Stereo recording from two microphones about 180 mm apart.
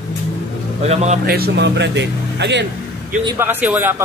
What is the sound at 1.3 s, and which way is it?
Speech, 65° right (ahead or behind).